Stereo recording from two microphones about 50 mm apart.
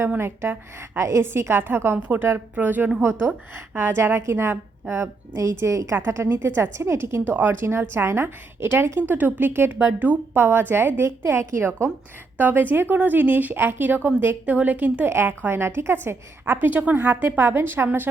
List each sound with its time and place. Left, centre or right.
0.2 s a woman's voice: right
1.2 s a woman's voice: right
2.0 s a woman's voice: right
3.8 s a woman's voice: right
6.4 s a woman's voice: right
7.3 s a woman's voice: right
7.6 s a woman's voice: right
9.0 s a woman's voice: right
9.7 s a woman's voice: right
10.3 s a woman's voice: right
12.4 s a woman's voice: right
15.0 s a woman's voice: right
16.6 s a woman's voice: right